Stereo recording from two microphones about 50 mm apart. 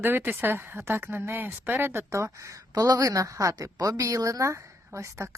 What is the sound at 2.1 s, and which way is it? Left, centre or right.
A woman's voice, right.